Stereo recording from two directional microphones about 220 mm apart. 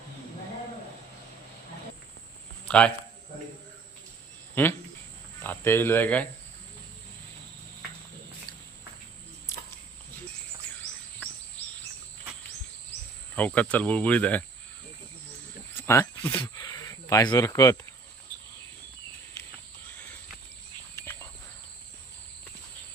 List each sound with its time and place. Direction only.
2.6 s a man's voice: 5° left (ahead or behind)
4.6 s speech: 10° left (ahead or behind)
13.3 s speech: 5° left (ahead or behind)
15.9 s speech: 10° left (ahead or behind)
18.3 s cricket: 20° right (ahead or behind)
20.9 s cricket: 10° left (ahead or behind)